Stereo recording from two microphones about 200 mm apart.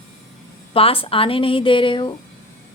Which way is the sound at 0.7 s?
30° left (ahead or behind).